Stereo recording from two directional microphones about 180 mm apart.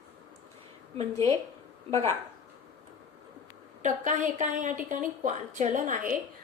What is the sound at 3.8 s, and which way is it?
Speech, 45° right (ahead or behind).